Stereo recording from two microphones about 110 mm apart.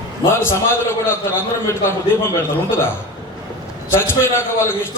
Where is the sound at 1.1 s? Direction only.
25° left (ahead or behind).